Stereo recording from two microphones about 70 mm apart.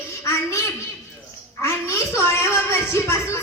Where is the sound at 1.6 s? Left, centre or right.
Left.